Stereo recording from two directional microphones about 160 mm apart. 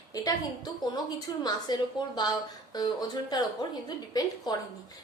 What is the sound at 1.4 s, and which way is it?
A woman's voice, 25° left (ahead or behind).